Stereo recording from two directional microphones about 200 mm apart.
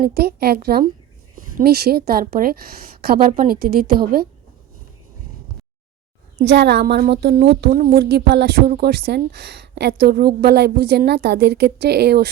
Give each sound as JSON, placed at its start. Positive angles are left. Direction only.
{"t": 0.0, "sound": "speech", "side_deg": -50}
{"t": 6.4, "sound": "speech", "side_deg": -60}